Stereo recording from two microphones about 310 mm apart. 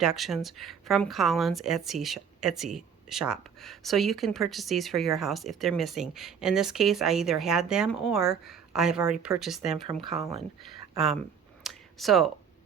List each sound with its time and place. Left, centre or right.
0.0 s a woman's voice: centre
9.8 s speech: centre
10.7 s speech: centre
11.6 s a sound: centre